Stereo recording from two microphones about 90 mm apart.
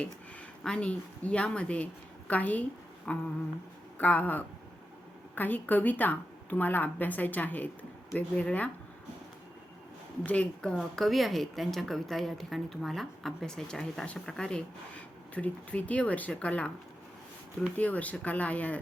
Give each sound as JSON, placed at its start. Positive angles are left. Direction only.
{"t": 0.6, "sound": "a woman's voice", "side_deg": 10}
{"t": 10.2, "sound": "a woman's voice", "side_deg": 15}
{"t": 10.8, "sound": "a woman's voice", "side_deg": 0}
{"t": 17.7, "sound": "a woman's voice", "side_deg": 15}